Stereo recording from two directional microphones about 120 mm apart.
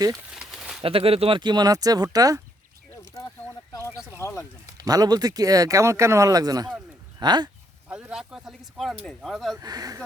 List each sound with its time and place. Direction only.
0.3 s bird: 5° right (ahead or behind)
0.8 s speech: 50° right (ahead or behind)
1.4 s speech: 35° right (ahead or behind)
3.7 s a sound: 25° left (ahead or behind)
4.2 s speech: 20° left (ahead or behind)
4.8 s speech: 30° right (ahead or behind)
7.9 s speech: 10° right (ahead or behind)
9.6 s speech: 35° right (ahead or behind)